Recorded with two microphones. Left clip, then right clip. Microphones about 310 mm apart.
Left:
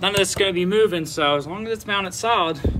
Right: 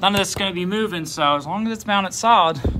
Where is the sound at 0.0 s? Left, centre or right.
Centre.